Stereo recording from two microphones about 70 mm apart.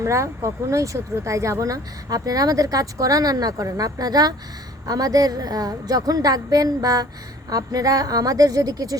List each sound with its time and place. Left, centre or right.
0.0 s speech: right